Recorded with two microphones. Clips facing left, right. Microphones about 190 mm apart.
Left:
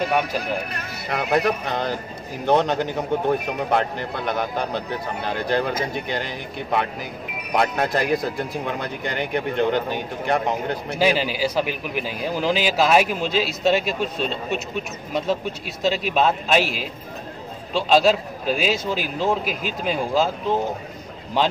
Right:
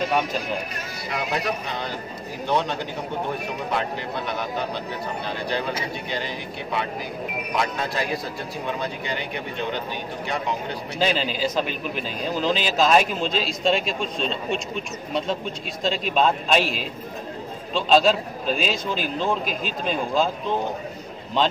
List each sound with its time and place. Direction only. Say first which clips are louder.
0.7 s speech: left 3 dB; 60° left (ahead or behind)
11.0 s a man's voice: left 3 dB; 10° left (ahead or behind)